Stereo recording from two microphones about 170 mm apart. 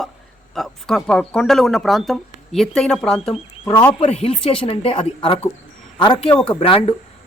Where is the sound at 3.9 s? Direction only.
35° left (ahead or behind).